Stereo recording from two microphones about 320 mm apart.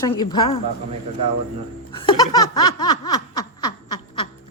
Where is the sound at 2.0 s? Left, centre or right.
Centre.